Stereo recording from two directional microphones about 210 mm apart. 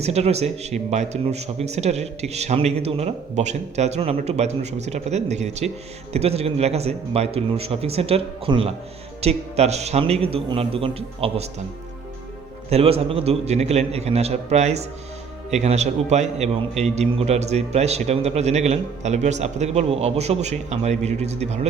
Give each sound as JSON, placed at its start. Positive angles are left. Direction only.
{"t": 0.0, "sound": "a man's voice", "side_deg": -30}
{"t": 12.7, "sound": "a man's voice", "side_deg": -30}